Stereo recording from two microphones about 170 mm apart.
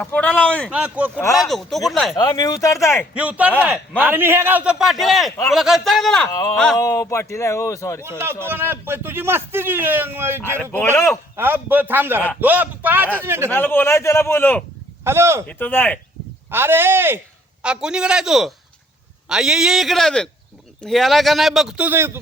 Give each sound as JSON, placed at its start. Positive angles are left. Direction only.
{"t": 0.0, "sound": "a man's voice", "side_deg": 5}
{"t": 0.7, "sound": "a man's voice", "side_deg": -5}
{"t": 2.1, "sound": "speech", "side_deg": 25}
{"t": 3.2, "sound": "a man's voice", "side_deg": -10}
{"t": 6.7, "sound": "a man's voice", "side_deg": 20}
{"t": 8.4, "sound": "a man's voice", "side_deg": -10}
{"t": 10.6, "sound": "a man's voice", "side_deg": 10}
{"t": 11.3, "sound": "a man's voice", "side_deg": -10}
{"t": 13.5, "sound": "a man's voice", "side_deg": 10}
{"t": 15.0, "sound": "a man's voice", "side_deg": -15}
{"t": 15.4, "sound": "a man's voice", "side_deg": 10}
{"t": 16.5, "sound": "a man's voice", "side_deg": -15}